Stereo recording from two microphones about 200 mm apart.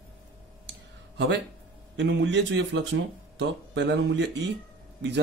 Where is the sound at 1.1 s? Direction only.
60° right (ahead or behind).